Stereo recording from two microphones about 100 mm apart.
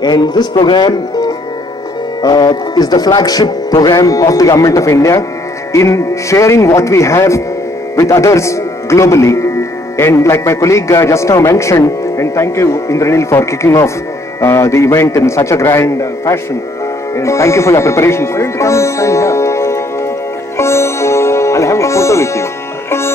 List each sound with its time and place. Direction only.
0.0 s speech: 45° left (ahead or behind); by 19.8 s 30° left (ahead or behind)
20.5 s sitar: 25° left (ahead or behind)